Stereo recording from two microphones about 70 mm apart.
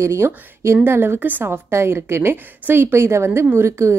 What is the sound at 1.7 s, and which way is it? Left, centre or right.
A woman's voice, right.